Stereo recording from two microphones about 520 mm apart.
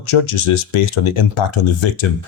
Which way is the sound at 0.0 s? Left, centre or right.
Left.